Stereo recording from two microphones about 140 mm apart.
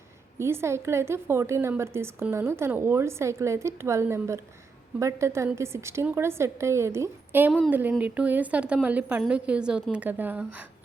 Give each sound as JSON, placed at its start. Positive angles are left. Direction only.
{"t": 0.3, "sound": "a woman's voice", "side_deg": -20}